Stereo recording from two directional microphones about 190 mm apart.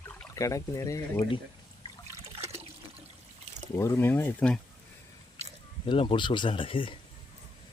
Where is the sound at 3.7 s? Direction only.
15° left (ahead or behind).